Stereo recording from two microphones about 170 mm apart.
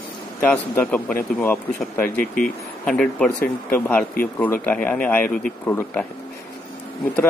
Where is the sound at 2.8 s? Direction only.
5° left (ahead or behind).